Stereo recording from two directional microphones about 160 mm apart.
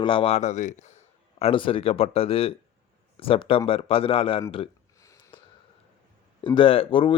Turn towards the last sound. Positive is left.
turn(degrees=35)  # may be behind; listen again after turning